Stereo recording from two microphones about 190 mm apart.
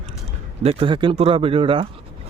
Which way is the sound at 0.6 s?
30° right (ahead or behind).